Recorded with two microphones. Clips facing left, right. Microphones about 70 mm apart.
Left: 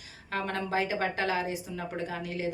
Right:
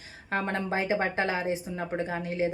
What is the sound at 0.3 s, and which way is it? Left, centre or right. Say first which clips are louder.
Speech: right 2 dB; right.